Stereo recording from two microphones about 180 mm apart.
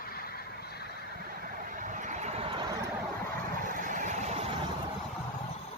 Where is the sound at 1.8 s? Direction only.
45° right (ahead or behind).